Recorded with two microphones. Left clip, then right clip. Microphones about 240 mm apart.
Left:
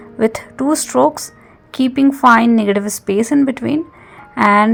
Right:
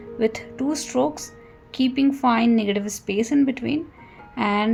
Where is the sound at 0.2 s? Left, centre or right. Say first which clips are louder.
Left 7 dB; left.